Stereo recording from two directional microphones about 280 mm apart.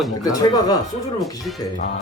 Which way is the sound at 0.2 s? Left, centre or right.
Centre.